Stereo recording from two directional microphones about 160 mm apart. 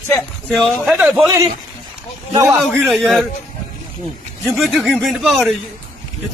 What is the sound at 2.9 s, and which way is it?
Speech, centre (ahead or behind).